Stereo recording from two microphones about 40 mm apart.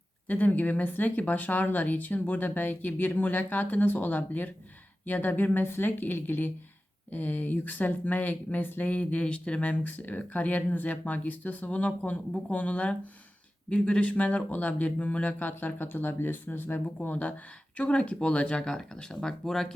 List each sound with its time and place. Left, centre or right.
0.3 s speech: left
5.6 s speech: left
17.1 s speech: left
18.6 s speech: centre